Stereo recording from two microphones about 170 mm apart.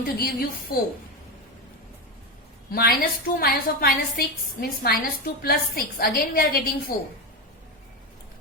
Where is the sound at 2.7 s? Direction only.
65° left (ahead or behind).